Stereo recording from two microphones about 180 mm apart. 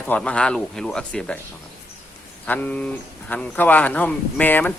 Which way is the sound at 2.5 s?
10° left (ahead or behind).